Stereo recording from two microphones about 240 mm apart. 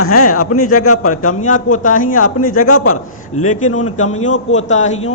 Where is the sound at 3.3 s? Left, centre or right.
Left.